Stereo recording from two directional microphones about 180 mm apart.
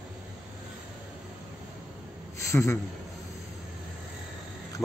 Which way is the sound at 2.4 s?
15° left (ahead or behind).